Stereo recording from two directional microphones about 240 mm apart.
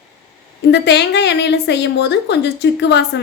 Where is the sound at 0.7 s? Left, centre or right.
Left.